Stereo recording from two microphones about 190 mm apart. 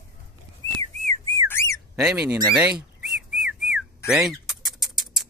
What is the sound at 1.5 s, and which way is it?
Whistling, 15° left (ahead or behind).